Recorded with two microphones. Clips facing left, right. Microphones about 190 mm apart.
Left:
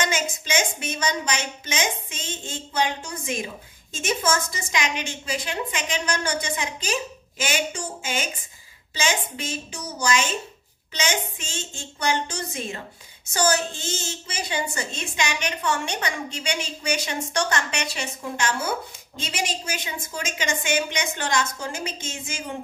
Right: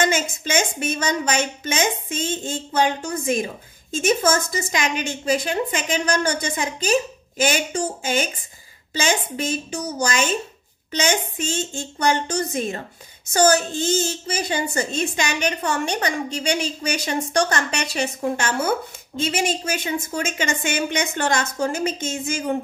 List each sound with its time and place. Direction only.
0.0 s a woman's voice: 50° right (ahead or behind)
14.2 s a woman's voice: 45° right (ahead or behind)